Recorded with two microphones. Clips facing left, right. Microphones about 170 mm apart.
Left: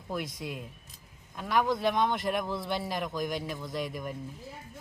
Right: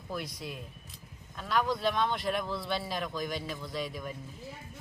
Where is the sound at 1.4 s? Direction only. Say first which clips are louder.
Left 2 dB; 15° left (ahead or behind).